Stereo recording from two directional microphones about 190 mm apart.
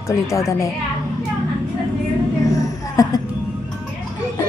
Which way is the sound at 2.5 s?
20° left (ahead or behind).